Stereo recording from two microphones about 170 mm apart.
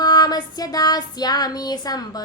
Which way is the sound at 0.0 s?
25° left (ahead or behind).